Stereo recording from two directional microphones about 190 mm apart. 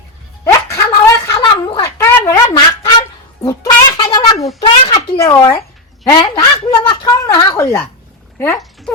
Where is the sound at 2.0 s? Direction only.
10° left (ahead or behind).